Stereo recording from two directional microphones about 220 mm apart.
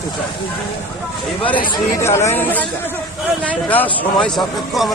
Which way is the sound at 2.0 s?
10° left (ahead or behind).